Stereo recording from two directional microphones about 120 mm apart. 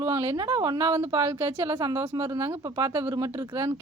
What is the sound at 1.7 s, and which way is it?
A woman's voice, 35° right (ahead or behind).